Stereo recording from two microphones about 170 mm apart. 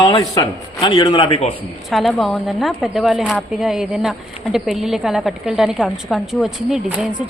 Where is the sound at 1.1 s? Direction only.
35° left (ahead or behind).